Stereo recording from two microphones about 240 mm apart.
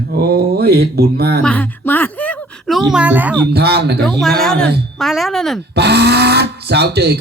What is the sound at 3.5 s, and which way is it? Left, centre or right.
Speech, right.